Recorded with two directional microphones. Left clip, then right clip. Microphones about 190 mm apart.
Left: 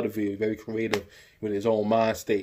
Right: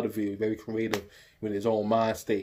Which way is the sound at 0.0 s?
20° left (ahead or behind).